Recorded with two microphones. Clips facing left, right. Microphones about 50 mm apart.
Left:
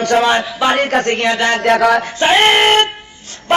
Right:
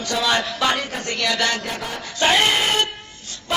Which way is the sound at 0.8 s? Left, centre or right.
Left.